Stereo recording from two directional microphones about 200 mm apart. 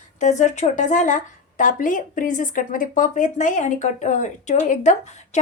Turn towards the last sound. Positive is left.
turn(degrees=35)  # may be behind; listen again after turning